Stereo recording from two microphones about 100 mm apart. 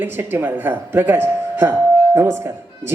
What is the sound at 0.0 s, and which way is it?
A woman's voice, 20° right (ahead or behind).